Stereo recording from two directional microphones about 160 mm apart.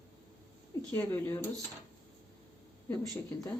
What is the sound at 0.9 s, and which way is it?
Speech, 10° left (ahead or behind).